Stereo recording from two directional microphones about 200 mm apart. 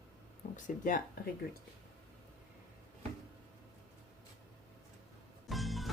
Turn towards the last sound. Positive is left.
turn(degrees=0)  # may be behind; listen again after turning